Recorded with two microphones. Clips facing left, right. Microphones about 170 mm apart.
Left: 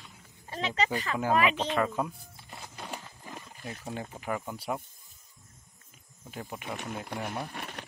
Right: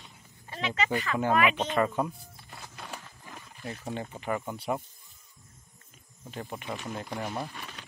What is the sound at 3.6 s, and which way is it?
Speech, centre (ahead or behind).